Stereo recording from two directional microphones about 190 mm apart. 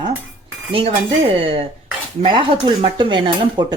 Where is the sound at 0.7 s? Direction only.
30° right (ahead or behind).